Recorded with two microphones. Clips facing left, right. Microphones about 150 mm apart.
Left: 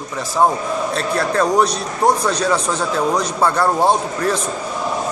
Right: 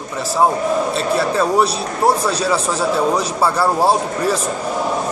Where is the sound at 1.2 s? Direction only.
5° right (ahead or behind).